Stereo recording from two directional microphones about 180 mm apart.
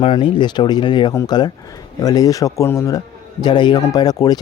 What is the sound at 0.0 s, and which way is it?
Speech, 25° left (ahead or behind).